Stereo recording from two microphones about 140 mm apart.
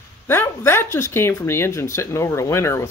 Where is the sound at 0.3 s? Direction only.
15° left (ahead or behind).